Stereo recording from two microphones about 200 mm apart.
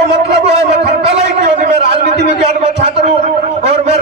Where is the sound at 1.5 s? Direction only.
30° right (ahead or behind).